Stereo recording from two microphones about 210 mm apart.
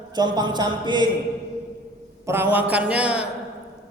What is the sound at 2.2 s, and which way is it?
A man's voice, 10° right (ahead or behind).